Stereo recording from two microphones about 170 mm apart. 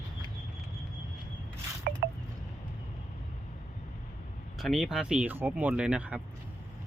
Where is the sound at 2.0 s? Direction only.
70° right (ahead or behind).